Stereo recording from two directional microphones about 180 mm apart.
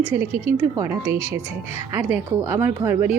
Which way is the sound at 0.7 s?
15° right (ahead or behind).